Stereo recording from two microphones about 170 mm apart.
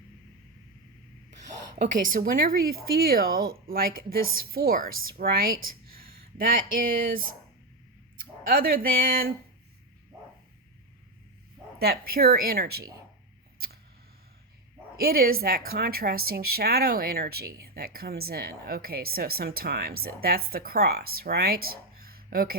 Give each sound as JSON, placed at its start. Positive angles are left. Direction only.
{"t": 1.8, "sound": "a woman's voice", "side_deg": -50}
{"t": 8.4, "sound": "a woman's voice", "side_deg": -60}
{"t": 11.8, "sound": "a woman's voice", "side_deg": -65}
{"t": 14.9, "sound": "a woman's voice", "side_deg": -60}